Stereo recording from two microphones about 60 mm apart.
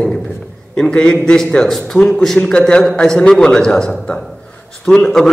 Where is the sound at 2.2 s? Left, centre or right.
Centre.